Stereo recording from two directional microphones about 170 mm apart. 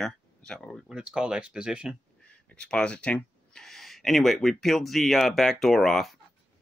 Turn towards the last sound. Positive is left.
turn(degrees=0)  # may be behind; listen again after turning